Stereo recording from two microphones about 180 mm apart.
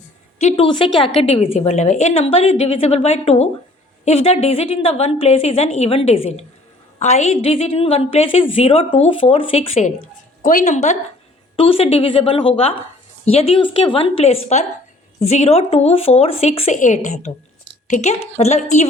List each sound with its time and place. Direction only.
0.3 s a woman's voice: 35° left (ahead or behind)
10.4 s a woman's voice: 45° left (ahead or behind)